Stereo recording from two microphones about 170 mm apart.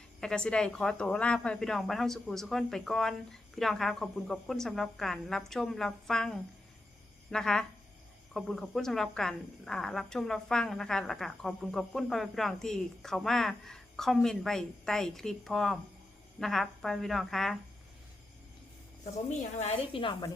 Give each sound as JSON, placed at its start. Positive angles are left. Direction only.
{"t": 0.2, "sound": "speech", "side_deg": 5}
{"t": 19.4, "sound": "a woman's voice", "side_deg": 40}